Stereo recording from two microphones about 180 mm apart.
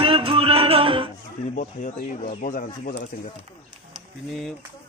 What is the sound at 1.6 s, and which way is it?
Speech, 45° left (ahead or behind).